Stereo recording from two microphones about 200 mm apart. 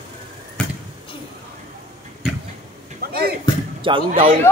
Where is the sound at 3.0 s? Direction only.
50° right (ahead or behind).